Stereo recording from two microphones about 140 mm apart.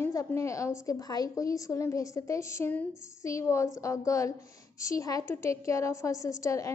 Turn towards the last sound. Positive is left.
turn(degrees=20)  # may be behind; listen again after turning